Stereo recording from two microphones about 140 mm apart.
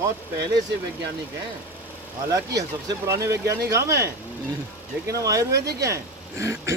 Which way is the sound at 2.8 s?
20° right (ahead or behind).